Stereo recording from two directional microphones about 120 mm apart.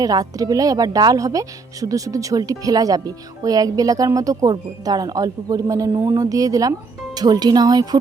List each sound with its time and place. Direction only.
0.0 s a woman's voice: 30° right (ahead or behind)